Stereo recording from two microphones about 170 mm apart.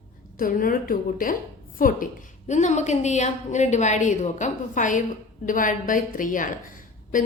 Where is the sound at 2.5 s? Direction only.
45° left (ahead or behind).